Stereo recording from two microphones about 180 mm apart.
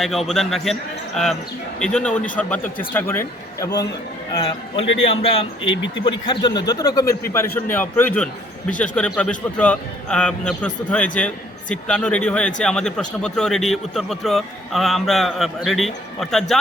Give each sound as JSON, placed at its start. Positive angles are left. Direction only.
{"t": 0.0, "sound": "a man's voice", "side_deg": 0}
{"t": 5.0, "sound": "a man's voice", "side_deg": 35}
{"t": 5.6, "sound": "speech", "side_deg": 90}
{"t": 6.1, "sound": "a man's voice", "side_deg": 25}